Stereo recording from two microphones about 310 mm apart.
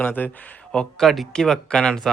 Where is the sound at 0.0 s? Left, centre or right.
Centre.